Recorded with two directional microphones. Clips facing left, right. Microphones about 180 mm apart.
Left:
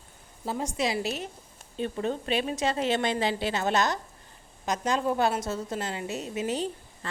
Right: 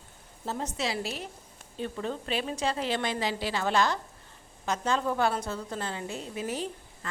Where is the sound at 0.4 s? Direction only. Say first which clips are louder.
Left 3 dB; 10° left (ahead or behind).